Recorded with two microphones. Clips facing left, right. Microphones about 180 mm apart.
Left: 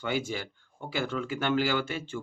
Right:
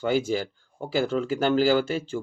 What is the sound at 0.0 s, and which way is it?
Speech, 35° right (ahead or behind).